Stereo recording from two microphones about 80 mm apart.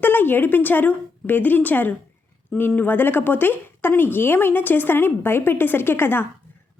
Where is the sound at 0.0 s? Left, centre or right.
Left.